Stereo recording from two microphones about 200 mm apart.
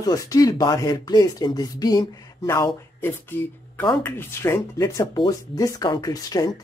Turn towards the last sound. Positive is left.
turn(degrees=20)  # may be behind; listen again after turning